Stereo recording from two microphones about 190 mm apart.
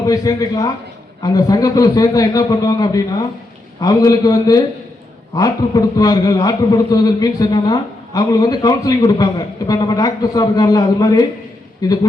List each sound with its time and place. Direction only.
0.0 s a man's voice: 20° left (ahead or behind)